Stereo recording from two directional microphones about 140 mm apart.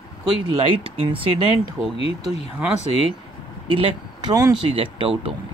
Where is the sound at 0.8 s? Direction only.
40° right (ahead or behind).